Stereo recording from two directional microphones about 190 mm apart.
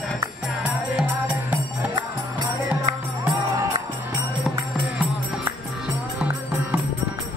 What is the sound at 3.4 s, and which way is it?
Music, 15° right (ahead or behind).